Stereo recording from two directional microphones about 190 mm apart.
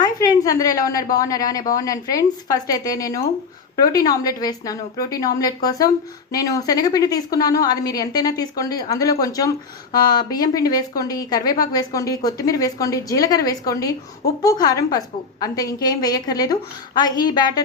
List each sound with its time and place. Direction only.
0.0 s a woman's voice: 20° left (ahead or behind)